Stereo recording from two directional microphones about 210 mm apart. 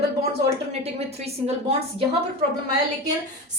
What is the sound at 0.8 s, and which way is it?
Speech, 30° right (ahead or behind).